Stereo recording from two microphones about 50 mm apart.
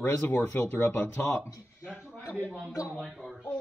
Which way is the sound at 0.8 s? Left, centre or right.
Left.